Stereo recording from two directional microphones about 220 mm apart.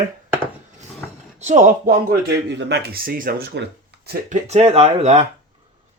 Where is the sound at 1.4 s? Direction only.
30° right (ahead or behind).